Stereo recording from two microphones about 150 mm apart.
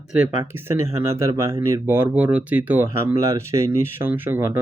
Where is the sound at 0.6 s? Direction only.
20° right (ahead or behind).